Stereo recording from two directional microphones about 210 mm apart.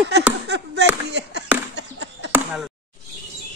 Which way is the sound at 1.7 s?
60° right (ahead or behind).